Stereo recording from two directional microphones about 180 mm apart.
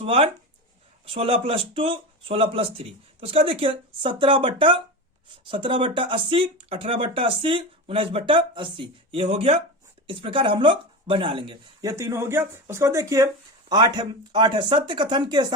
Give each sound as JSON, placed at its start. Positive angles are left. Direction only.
{"t": 0.0, "sound": "speech", "side_deg": -35}